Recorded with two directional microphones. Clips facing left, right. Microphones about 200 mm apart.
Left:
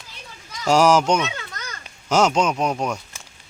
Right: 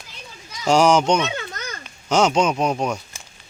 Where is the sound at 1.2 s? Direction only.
25° right (ahead or behind).